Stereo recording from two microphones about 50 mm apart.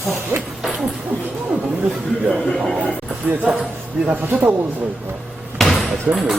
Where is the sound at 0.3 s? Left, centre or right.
Right.